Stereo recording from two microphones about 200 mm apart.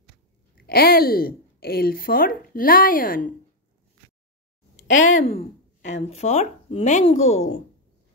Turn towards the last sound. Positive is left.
turn(degrees=90)